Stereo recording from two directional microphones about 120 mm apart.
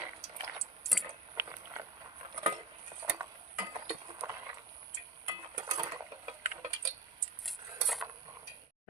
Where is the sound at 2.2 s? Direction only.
45° right (ahead or behind).